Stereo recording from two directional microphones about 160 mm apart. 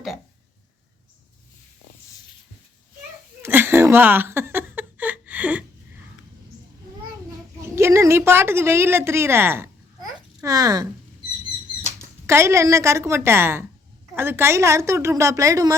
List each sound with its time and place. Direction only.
3.4 s a sound: 15° right (ahead or behind)
7.8 s a woman's voice: 15° right (ahead or behind)
11.9 s a woman's voice: 15° right (ahead or behind)